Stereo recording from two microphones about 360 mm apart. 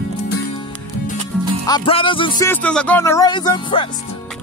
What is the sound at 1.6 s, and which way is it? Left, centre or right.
Speech, centre.